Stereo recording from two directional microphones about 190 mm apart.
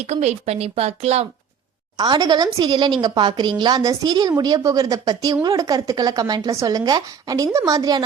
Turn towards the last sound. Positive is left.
turn(degrees=-20)  # may be behind; listen again after turning